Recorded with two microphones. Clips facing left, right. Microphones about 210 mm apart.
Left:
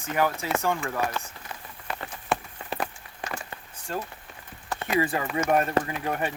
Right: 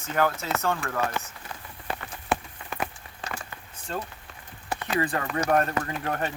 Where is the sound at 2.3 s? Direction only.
Centre (ahead or behind).